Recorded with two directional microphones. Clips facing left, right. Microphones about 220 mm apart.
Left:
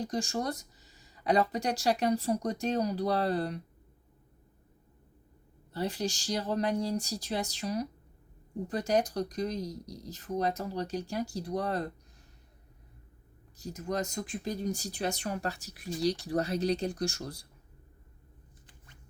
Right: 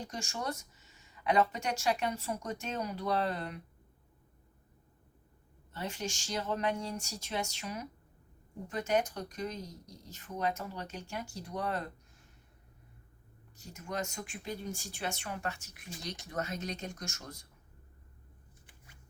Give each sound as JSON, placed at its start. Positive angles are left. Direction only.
{"t": 0.0, "sound": "speech", "side_deg": 35}
{"t": 5.7, "sound": "speech", "side_deg": 35}
{"t": 13.6, "sound": "speech", "side_deg": 35}